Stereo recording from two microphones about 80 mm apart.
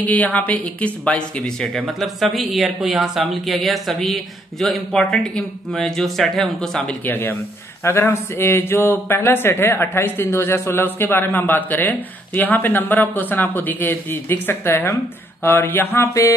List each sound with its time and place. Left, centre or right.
0.0 s speech: centre
2.0 s speech: centre
7.1 s speech: left